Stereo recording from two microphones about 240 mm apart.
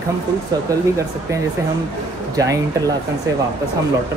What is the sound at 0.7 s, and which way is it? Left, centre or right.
Speech, centre.